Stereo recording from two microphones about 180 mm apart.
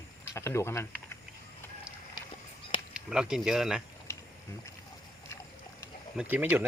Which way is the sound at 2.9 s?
5° right (ahead or behind).